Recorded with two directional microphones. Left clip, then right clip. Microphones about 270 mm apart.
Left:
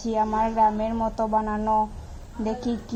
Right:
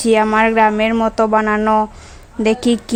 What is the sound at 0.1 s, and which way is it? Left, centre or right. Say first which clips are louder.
A woman's voice: right 11 dB; right.